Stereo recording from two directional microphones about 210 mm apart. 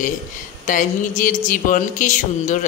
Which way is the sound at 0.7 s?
40° left (ahead or behind).